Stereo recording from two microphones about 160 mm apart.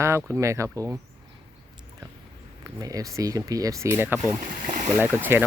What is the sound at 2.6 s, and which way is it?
Speech, 20° right (ahead or behind).